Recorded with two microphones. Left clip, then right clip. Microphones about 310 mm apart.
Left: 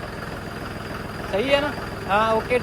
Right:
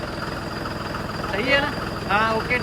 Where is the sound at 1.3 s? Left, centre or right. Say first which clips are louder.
Even; centre.